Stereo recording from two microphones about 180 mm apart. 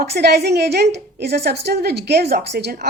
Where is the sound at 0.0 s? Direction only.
65° right (ahead or behind).